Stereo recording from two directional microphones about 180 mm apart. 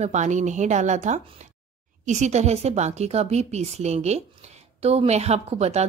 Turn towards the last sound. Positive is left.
turn(degrees=-35)  # may be behind; listen again after turning